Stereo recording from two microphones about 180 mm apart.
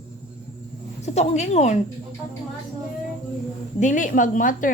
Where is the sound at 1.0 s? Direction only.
40° left (ahead or behind).